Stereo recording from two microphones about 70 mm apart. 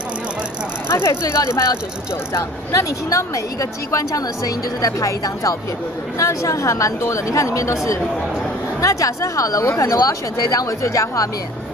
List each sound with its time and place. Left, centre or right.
0.8 s vehicle: left
1.2 s speech: left